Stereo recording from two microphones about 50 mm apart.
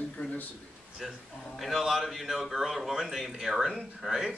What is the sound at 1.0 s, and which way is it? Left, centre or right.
A man's voice, centre.